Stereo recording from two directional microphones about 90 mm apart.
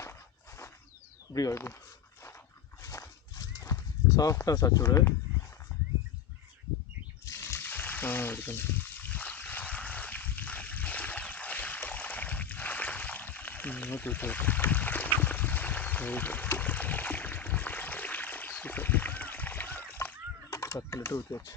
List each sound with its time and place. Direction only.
0.0 s walk: 30° left (ahead or behind)
1.3 s speech: 40° left (ahead or behind)
2.8 s horse: 35° left (ahead or behind)
4.4 s speech: 40° left (ahead or behind)
7.3 s water: 30° left (ahead or behind)
20.5 s typing: 35° left (ahead or behind)